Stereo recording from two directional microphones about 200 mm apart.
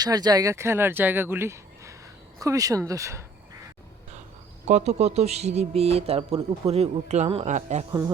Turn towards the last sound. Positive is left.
turn(degrees=-35)  # may be behind; listen again after turning